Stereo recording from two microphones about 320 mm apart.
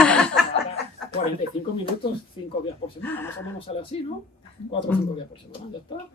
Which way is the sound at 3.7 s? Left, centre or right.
Centre.